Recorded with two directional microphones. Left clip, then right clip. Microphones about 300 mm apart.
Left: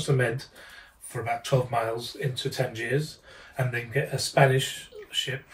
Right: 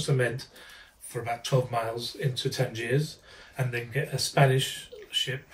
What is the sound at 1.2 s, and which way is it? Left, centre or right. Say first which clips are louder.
Speech: left 2 dB; centre.